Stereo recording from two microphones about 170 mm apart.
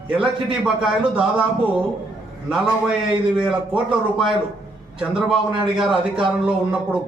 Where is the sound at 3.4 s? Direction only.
5° right (ahead or behind).